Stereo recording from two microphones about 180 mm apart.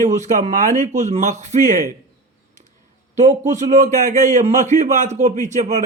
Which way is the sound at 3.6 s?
45° right (ahead or behind).